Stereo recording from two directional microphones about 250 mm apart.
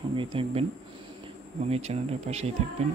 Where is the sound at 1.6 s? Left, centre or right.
Right.